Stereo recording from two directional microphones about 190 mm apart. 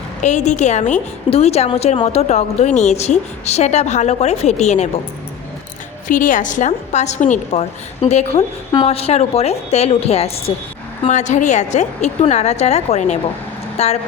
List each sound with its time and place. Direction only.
0.2 s a woman's voice: 40° left (ahead or behind)
6.1 s a woman's voice: 45° left (ahead or behind)